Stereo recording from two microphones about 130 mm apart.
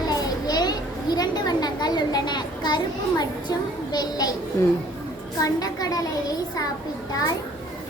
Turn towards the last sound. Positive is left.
turn(degrees=30)  # may be behind; listen again after turning